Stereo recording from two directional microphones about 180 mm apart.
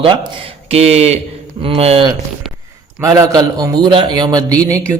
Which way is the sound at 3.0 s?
20° right (ahead or behind).